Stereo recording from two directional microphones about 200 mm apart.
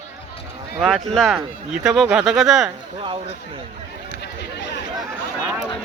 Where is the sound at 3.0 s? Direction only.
25° right (ahead or behind).